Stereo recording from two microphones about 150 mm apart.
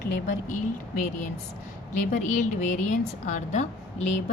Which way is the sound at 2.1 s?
60° left (ahead or behind).